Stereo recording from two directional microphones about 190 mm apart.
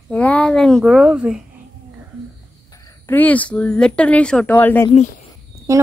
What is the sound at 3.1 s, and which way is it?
Speech, 10° left (ahead or behind).